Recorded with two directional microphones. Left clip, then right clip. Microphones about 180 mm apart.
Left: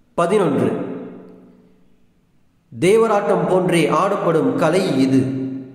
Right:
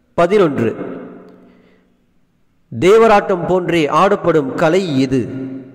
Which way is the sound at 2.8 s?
40° right (ahead or behind).